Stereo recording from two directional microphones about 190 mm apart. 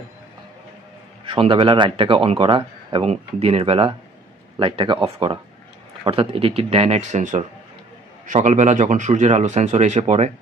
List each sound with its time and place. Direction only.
1.2 s speech: 25° right (ahead or behind)